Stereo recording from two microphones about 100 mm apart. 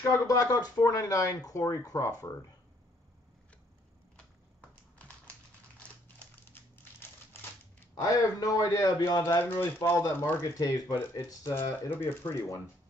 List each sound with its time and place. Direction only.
0.1 s speech: 35° left (ahead or behind)
4.6 s typing: 15° left (ahead or behind)
5.8 s crumpling: 20° left (ahead or behind)
7.9 s speech: 35° left (ahead or behind)
9.5 s speech: 25° left (ahead or behind)
10.6 s speech: 40° left (ahead or behind)
11.2 s speech: 25° left (ahead or behind)